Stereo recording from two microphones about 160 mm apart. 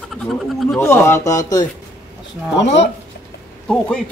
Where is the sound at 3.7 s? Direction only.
5° left (ahead or behind).